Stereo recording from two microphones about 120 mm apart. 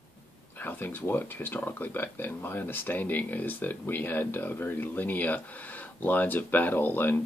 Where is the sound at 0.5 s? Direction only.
15° left (ahead or behind).